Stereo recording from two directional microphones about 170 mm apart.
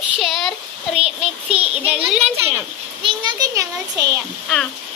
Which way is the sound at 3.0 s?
25° right (ahead or behind).